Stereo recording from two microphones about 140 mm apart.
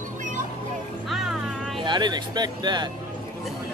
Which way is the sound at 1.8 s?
30° right (ahead or behind).